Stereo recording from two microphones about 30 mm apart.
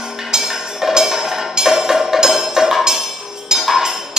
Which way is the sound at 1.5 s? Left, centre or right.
Centre.